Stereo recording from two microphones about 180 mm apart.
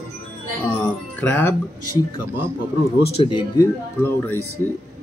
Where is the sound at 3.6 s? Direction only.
10° left (ahead or behind).